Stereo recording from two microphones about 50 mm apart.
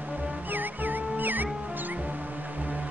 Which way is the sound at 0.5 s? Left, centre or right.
Right.